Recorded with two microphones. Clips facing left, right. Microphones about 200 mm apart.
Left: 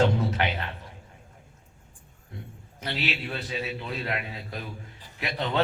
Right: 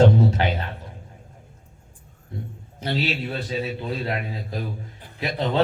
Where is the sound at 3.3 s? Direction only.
30° right (ahead or behind).